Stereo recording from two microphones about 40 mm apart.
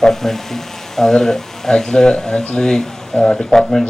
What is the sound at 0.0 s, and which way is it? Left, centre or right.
Speech, centre.